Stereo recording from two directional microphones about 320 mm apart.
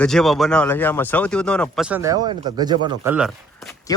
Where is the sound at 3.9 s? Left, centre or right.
Centre.